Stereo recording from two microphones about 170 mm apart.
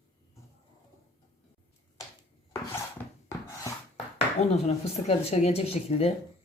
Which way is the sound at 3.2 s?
15° left (ahead or behind).